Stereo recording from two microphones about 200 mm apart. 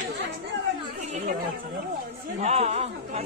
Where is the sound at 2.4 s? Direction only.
35° right (ahead or behind).